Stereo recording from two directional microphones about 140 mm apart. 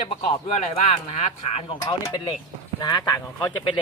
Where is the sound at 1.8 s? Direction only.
30° left (ahead or behind).